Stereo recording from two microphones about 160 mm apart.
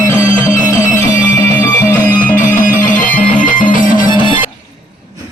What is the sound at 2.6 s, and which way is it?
Music, 55° left (ahead or behind).